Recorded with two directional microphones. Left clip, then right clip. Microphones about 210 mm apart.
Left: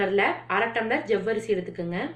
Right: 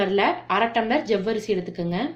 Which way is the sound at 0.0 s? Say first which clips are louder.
Right 2 dB; 55° right (ahead or behind).